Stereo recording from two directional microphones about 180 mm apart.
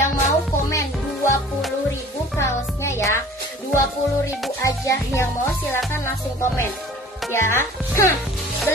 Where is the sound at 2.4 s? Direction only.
15° left (ahead or behind).